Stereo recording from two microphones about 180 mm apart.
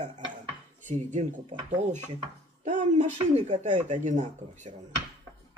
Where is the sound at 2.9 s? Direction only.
40° right (ahead or behind).